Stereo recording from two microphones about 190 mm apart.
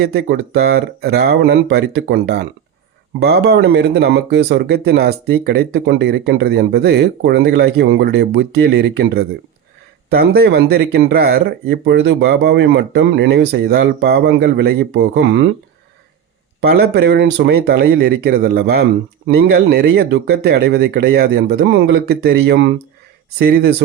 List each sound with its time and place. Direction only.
0.0 s speech: 60° right (ahead or behind)
16.6 s speech: 55° right (ahead or behind)